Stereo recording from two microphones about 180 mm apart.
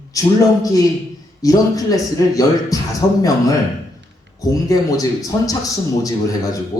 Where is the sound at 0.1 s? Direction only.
20° left (ahead or behind).